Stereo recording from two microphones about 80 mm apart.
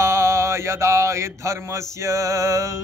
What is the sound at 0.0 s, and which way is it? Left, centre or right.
Mantra, right.